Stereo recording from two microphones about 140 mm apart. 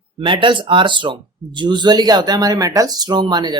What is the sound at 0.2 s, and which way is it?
Speech, 35° right (ahead or behind).